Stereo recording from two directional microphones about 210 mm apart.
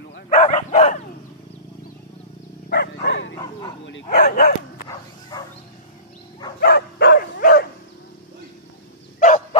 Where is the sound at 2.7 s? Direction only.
50° left (ahead or behind).